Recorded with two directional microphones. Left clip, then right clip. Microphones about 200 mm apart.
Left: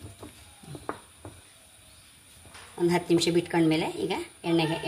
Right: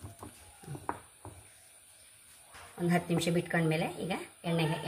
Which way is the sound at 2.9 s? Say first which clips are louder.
Left 7 dB; 40° left (ahead or behind).